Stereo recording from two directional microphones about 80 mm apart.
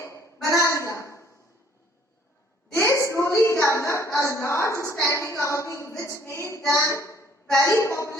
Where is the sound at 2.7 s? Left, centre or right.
Left.